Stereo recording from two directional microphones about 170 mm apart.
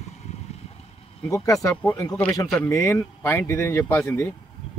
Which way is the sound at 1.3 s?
20° left (ahead or behind).